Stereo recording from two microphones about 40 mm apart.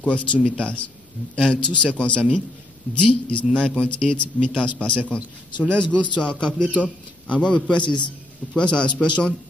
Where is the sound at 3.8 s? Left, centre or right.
Left.